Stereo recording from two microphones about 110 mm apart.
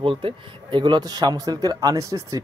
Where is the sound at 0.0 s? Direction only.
55° right (ahead or behind).